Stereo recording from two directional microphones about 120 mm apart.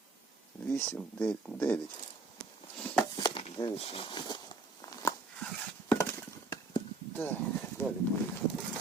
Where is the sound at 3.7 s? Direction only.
55° left (ahead or behind); by 5.0 s 40° left (ahead or behind).